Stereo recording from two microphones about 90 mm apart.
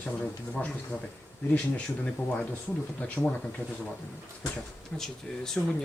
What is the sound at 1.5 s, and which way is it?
Speech, 15° left (ahead or behind).